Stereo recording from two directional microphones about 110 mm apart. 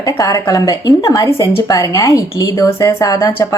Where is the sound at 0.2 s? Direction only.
30° left (ahead or behind).